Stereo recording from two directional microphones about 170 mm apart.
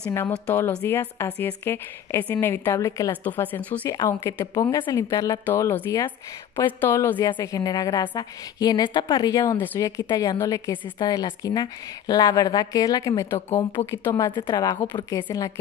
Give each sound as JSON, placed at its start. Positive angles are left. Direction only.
{"t": 0.1, "sound": "a woman's voice", "side_deg": 15}
{"t": 7.2, "sound": "a woman's voice", "side_deg": 25}